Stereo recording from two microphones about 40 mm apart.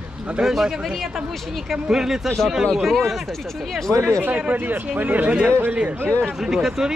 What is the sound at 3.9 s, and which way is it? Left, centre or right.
Speech, right.